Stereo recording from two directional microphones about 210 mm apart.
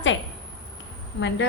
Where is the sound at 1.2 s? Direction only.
55° left (ahead or behind).